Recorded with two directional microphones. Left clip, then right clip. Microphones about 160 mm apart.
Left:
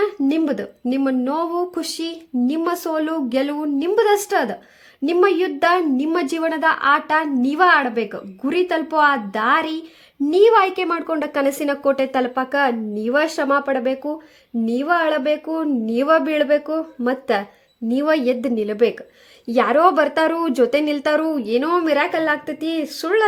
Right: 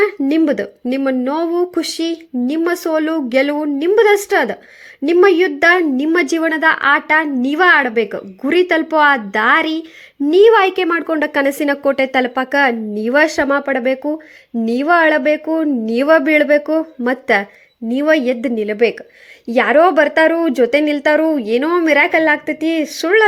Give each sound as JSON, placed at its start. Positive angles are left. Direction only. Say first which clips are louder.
{"t": 0.0, "sound": "speech", "louder": "right 5 dB", "side_deg": -15}